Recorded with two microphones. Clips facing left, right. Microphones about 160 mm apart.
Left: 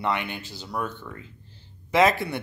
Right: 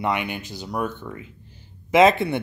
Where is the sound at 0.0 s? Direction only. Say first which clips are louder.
Right 3 dB; 15° right (ahead or behind).